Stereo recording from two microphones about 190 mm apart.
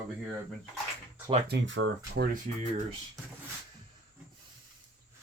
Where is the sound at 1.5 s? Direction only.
80° right.